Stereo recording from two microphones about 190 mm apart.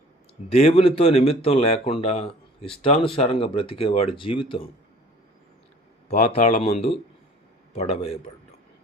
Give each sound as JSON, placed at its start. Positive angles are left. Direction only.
{"t": 0.5, "sound": "speech", "side_deg": 30}
{"t": 6.1, "sound": "speech", "side_deg": 40}